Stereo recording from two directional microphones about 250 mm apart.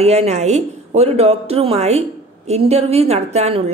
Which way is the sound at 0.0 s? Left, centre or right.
Right.